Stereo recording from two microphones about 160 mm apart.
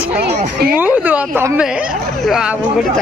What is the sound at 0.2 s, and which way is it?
Speech, 90° right.